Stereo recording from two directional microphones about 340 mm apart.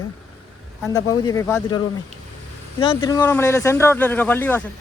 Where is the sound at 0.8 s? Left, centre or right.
Centre.